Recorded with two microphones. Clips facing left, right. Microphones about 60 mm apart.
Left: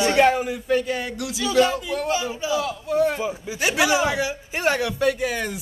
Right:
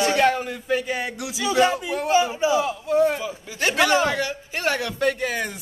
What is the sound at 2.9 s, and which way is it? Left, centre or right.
Speech, centre.